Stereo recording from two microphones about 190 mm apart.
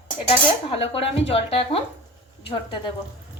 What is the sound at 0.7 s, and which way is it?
Speech, 30° left (ahead or behind).